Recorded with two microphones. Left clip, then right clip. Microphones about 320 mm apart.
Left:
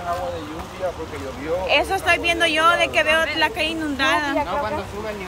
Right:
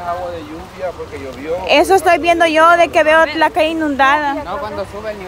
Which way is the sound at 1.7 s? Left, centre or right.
Centre.